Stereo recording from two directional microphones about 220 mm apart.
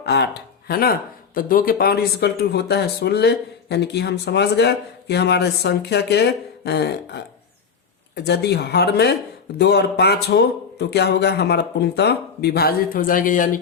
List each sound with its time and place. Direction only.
0.0 s speech: 50° left (ahead or behind)